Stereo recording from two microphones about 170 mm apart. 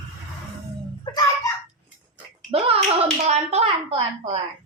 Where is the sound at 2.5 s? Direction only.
35° right (ahead or behind).